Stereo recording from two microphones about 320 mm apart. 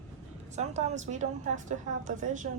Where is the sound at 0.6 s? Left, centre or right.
Right.